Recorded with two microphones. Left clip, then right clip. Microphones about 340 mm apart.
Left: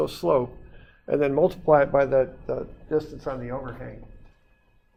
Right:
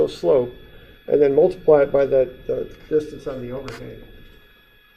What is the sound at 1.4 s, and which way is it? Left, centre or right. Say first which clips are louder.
Speech: right 4 dB; left.